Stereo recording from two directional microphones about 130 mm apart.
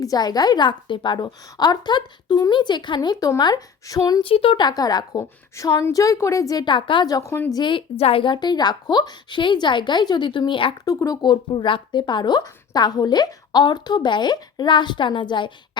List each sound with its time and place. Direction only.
0.0 s speech: 30° left (ahead or behind)
4.2 s a woman's voice: 45° left (ahead or behind); by 7.5 s 20° left (ahead or behind)
7.5 s speech: 40° left (ahead or behind)
10.8 s speech: 25° left (ahead or behind)